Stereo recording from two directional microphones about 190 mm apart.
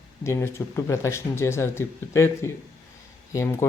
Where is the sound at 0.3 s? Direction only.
15° left (ahead or behind).